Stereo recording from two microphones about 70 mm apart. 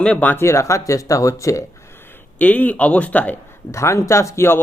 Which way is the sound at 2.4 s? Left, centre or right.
Left.